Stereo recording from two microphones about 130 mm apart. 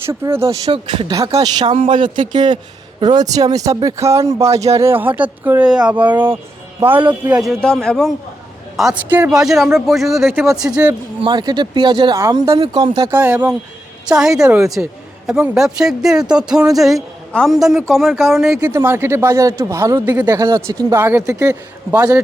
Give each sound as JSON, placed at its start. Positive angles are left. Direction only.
{"t": 0.1, "sound": "speech", "side_deg": -20}
{"t": 0.7, "sound": "speech", "side_deg": -40}
{"t": 1.1, "sound": "speech", "side_deg": -25}
{"t": 1.7, "sound": "a man's voice", "side_deg": -40}
{"t": 9.0, "sound": "speech", "side_deg": -15}
{"t": 9.3, "sound": "a man's voice", "side_deg": -5}
{"t": 11.2, "sound": "speech", "side_deg": -30}
{"t": 13.1, "sound": "a man's voice", "side_deg": -15}
{"t": 18.6, "sound": "speech", "side_deg": -20}